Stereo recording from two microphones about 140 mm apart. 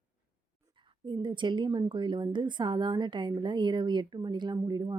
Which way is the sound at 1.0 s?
35° right (ahead or behind).